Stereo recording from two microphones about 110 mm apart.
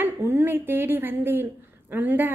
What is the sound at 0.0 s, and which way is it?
A woman's voice, 20° right (ahead or behind).